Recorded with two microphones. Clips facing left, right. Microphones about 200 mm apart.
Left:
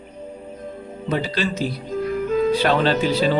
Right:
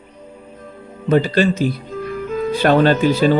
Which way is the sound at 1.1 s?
50° right (ahead or behind).